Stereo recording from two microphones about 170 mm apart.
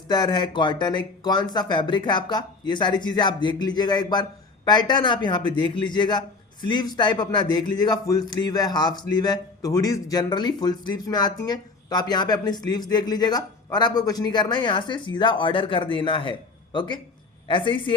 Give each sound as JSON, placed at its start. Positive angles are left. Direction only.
{"t": 0.1, "sound": "speech", "side_deg": 25}